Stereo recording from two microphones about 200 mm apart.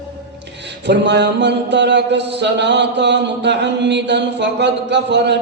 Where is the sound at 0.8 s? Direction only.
60° right (ahead or behind).